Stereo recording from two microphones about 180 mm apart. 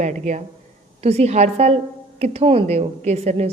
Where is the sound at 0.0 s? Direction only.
40° right (ahead or behind).